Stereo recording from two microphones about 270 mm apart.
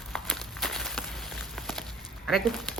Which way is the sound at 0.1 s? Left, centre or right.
Centre.